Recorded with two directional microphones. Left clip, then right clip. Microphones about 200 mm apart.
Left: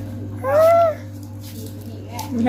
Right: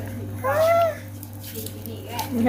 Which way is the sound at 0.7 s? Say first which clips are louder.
Left 5 dB; 30° left (ahead or behind).